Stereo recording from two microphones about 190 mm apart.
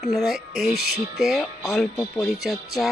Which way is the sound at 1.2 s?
Centre (ahead or behind).